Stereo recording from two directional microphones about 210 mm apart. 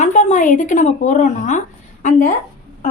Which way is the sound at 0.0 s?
35° left (ahead or behind).